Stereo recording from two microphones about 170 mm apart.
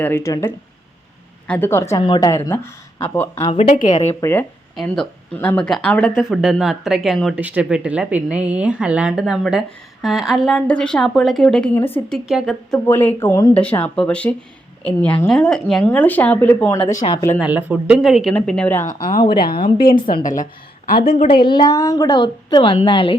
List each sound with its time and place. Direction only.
0.0 s a woman's voice: 15° left (ahead or behind)
3.5 s speech: 40° left (ahead or behind)
4.2 s a woman's voice: 15° left (ahead or behind)
12.9 s a woman's voice: 10° left (ahead or behind)
16.7 s a woman's voice: 25° left (ahead or behind)
17.2 s a woman's voice: 15° left (ahead or behind)
17.4 s speech: 10° right (ahead or behind); by 18.9 s 10° left (ahead or behind)
18.9 s speech: 55° left (ahead or behind)
19.8 s a woman's voice: 65° left (ahead or behind)
21.2 s a woman's voice: 25° left (ahead or behind)